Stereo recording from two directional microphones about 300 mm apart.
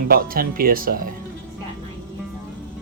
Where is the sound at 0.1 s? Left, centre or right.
Right.